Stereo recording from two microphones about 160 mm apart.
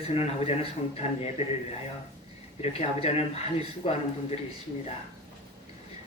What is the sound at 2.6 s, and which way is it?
Speech, 40° left (ahead or behind).